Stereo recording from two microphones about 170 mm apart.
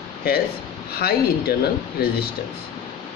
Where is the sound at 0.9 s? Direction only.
65° left (ahead or behind).